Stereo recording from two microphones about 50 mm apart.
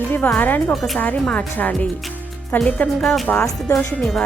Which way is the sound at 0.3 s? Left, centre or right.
Left.